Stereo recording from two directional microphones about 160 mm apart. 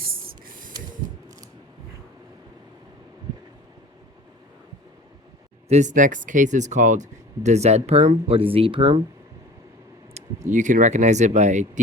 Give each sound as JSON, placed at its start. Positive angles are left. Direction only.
{"t": 0.0, "sound": "spray", "side_deg": -65}
{"t": 5.6, "sound": "speech", "side_deg": -45}
{"t": 10.2, "sound": "speech", "side_deg": -50}